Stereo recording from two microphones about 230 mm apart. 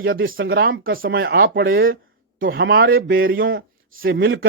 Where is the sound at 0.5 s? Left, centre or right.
Right.